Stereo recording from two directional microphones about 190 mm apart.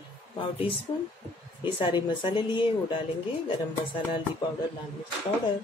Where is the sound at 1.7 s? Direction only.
25° left (ahead or behind).